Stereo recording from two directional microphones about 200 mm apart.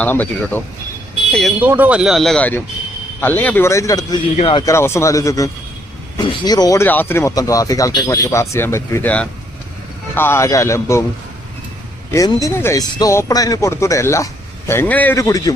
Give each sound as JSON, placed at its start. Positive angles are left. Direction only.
{"t": 0.0, "sound": "speech", "side_deg": 10}
{"t": 1.6, "sound": "speech", "side_deg": -10}
{"t": 4.4, "sound": "speech", "side_deg": 30}
{"t": 4.6, "sound": "speech", "side_deg": 15}
{"t": 12.1, "sound": "speech", "side_deg": 15}